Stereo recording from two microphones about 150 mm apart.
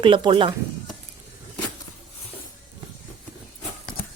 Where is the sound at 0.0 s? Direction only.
35° right (ahead or behind).